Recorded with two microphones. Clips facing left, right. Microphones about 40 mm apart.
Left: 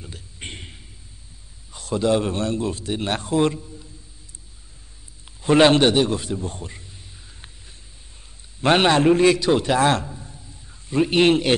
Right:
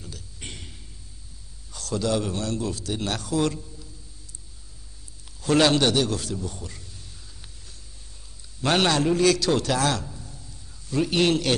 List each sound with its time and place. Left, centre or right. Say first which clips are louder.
0.0 s a sound: left 3 dB; left
1.7 s a man's voice: left 5 dB; left
5.4 s a man's voice: left 5 dB; left
8.5 s a man's voice: left 5 dB; left